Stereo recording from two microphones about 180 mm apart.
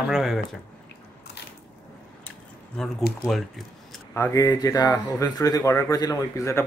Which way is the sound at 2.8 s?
5° left (ahead or behind).